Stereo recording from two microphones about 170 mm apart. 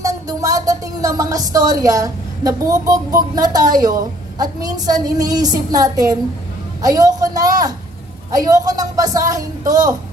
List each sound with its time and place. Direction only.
0.0 s a woman's voice: 20° right (ahead or behind)